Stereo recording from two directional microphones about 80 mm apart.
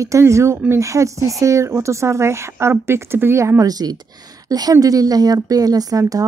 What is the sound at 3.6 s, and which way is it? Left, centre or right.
Speech, right.